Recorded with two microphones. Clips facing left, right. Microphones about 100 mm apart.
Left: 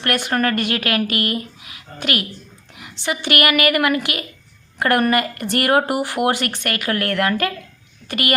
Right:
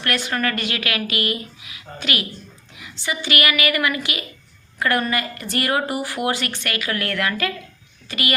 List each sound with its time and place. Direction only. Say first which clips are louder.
0.0 s speech: left 3 dB; 50° left (ahead or behind)